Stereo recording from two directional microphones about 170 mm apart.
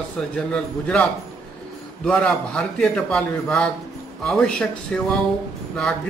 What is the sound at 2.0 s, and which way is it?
A man's voice, 5° left (ahead or behind).